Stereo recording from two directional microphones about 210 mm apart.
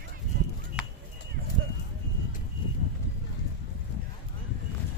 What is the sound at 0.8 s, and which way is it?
Chop, 5° right (ahead or behind).